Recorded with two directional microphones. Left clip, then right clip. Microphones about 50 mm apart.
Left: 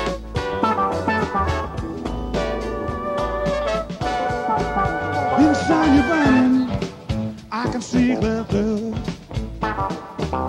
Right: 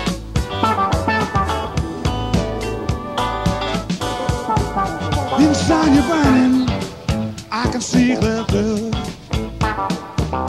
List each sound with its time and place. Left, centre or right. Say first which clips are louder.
0.6 s music: right 3 dB; right
3.2 s music: right 3 dB; right
6.3 s music: right 2 dB; right
7.9 s music: right 3 dB; right